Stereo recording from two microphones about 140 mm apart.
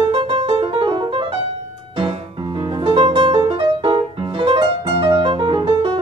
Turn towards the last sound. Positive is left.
turn(degrees=-40)  # may be behind; listen again after turning